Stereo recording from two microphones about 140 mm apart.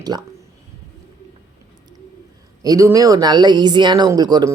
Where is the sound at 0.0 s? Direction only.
30° right (ahead or behind).